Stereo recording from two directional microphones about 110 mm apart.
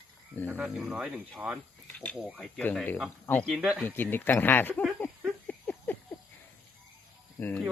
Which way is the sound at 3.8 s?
20° left (ahead or behind).